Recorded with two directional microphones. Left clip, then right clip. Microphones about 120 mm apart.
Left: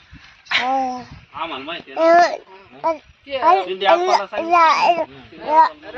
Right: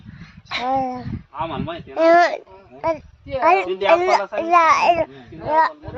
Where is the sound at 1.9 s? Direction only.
50° right (ahead or behind).